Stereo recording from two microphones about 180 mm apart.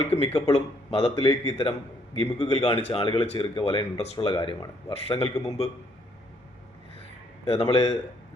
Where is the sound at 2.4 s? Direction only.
35° left (ahead or behind).